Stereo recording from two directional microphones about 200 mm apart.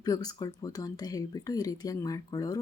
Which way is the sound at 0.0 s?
20° left (ahead or behind).